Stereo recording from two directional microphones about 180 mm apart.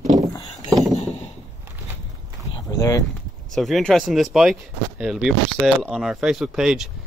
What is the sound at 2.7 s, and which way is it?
Speech, 20° left (ahead or behind).